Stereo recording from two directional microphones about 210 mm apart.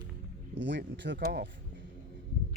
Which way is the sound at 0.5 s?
60° right (ahead or behind).